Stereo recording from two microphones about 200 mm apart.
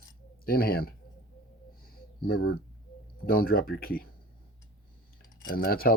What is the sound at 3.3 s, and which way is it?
Speech, 50° left (ahead or behind).